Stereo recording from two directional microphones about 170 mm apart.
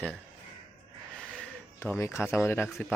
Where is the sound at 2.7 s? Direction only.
Centre (ahead or behind).